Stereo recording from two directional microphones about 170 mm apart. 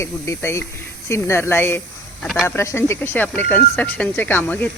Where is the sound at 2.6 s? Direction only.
15° left (ahead or behind).